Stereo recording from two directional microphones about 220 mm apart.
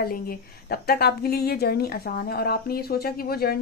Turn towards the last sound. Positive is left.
turn(degrees=45)  # may be behind; listen again after turning